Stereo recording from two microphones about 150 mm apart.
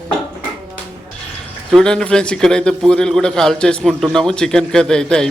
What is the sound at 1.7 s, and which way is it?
A man's voice, 5° left (ahead or behind).